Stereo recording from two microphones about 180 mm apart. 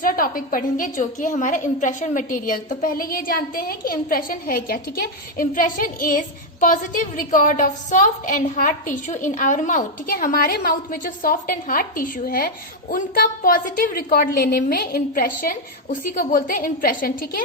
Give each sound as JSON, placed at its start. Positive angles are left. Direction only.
{"t": 0.0, "sound": "a woman's voice", "side_deg": 50}